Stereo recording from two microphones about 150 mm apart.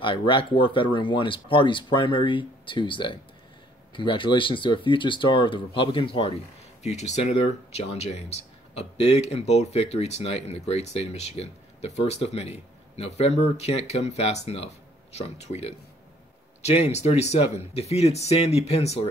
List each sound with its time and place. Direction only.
0.0 s speech: 35° left (ahead or behind)
6.8 s speech: 50° left (ahead or behind)